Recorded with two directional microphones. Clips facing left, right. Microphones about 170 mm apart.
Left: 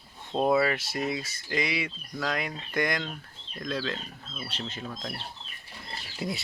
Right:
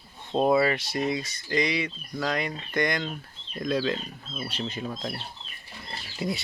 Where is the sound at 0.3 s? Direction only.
Centre (ahead or behind).